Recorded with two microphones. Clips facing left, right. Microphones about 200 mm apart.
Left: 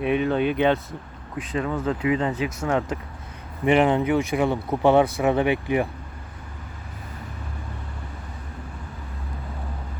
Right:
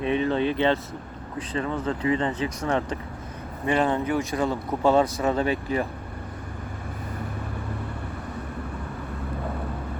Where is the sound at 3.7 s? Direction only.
20° left (ahead or behind).